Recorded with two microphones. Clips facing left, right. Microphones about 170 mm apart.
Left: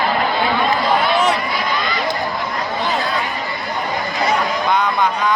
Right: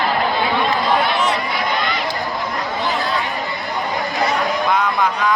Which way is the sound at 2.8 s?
20° left (ahead or behind).